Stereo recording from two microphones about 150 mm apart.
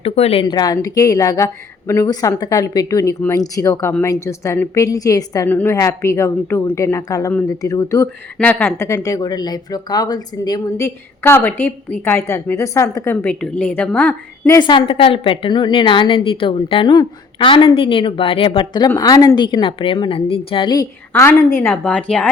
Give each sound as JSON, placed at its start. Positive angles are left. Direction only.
{"t": 0.0, "sound": "a woman's voice", "side_deg": 40}
{"t": 14.6, "sound": "a woman's voice", "side_deg": 30}
{"t": 21.1, "sound": "speech", "side_deg": 15}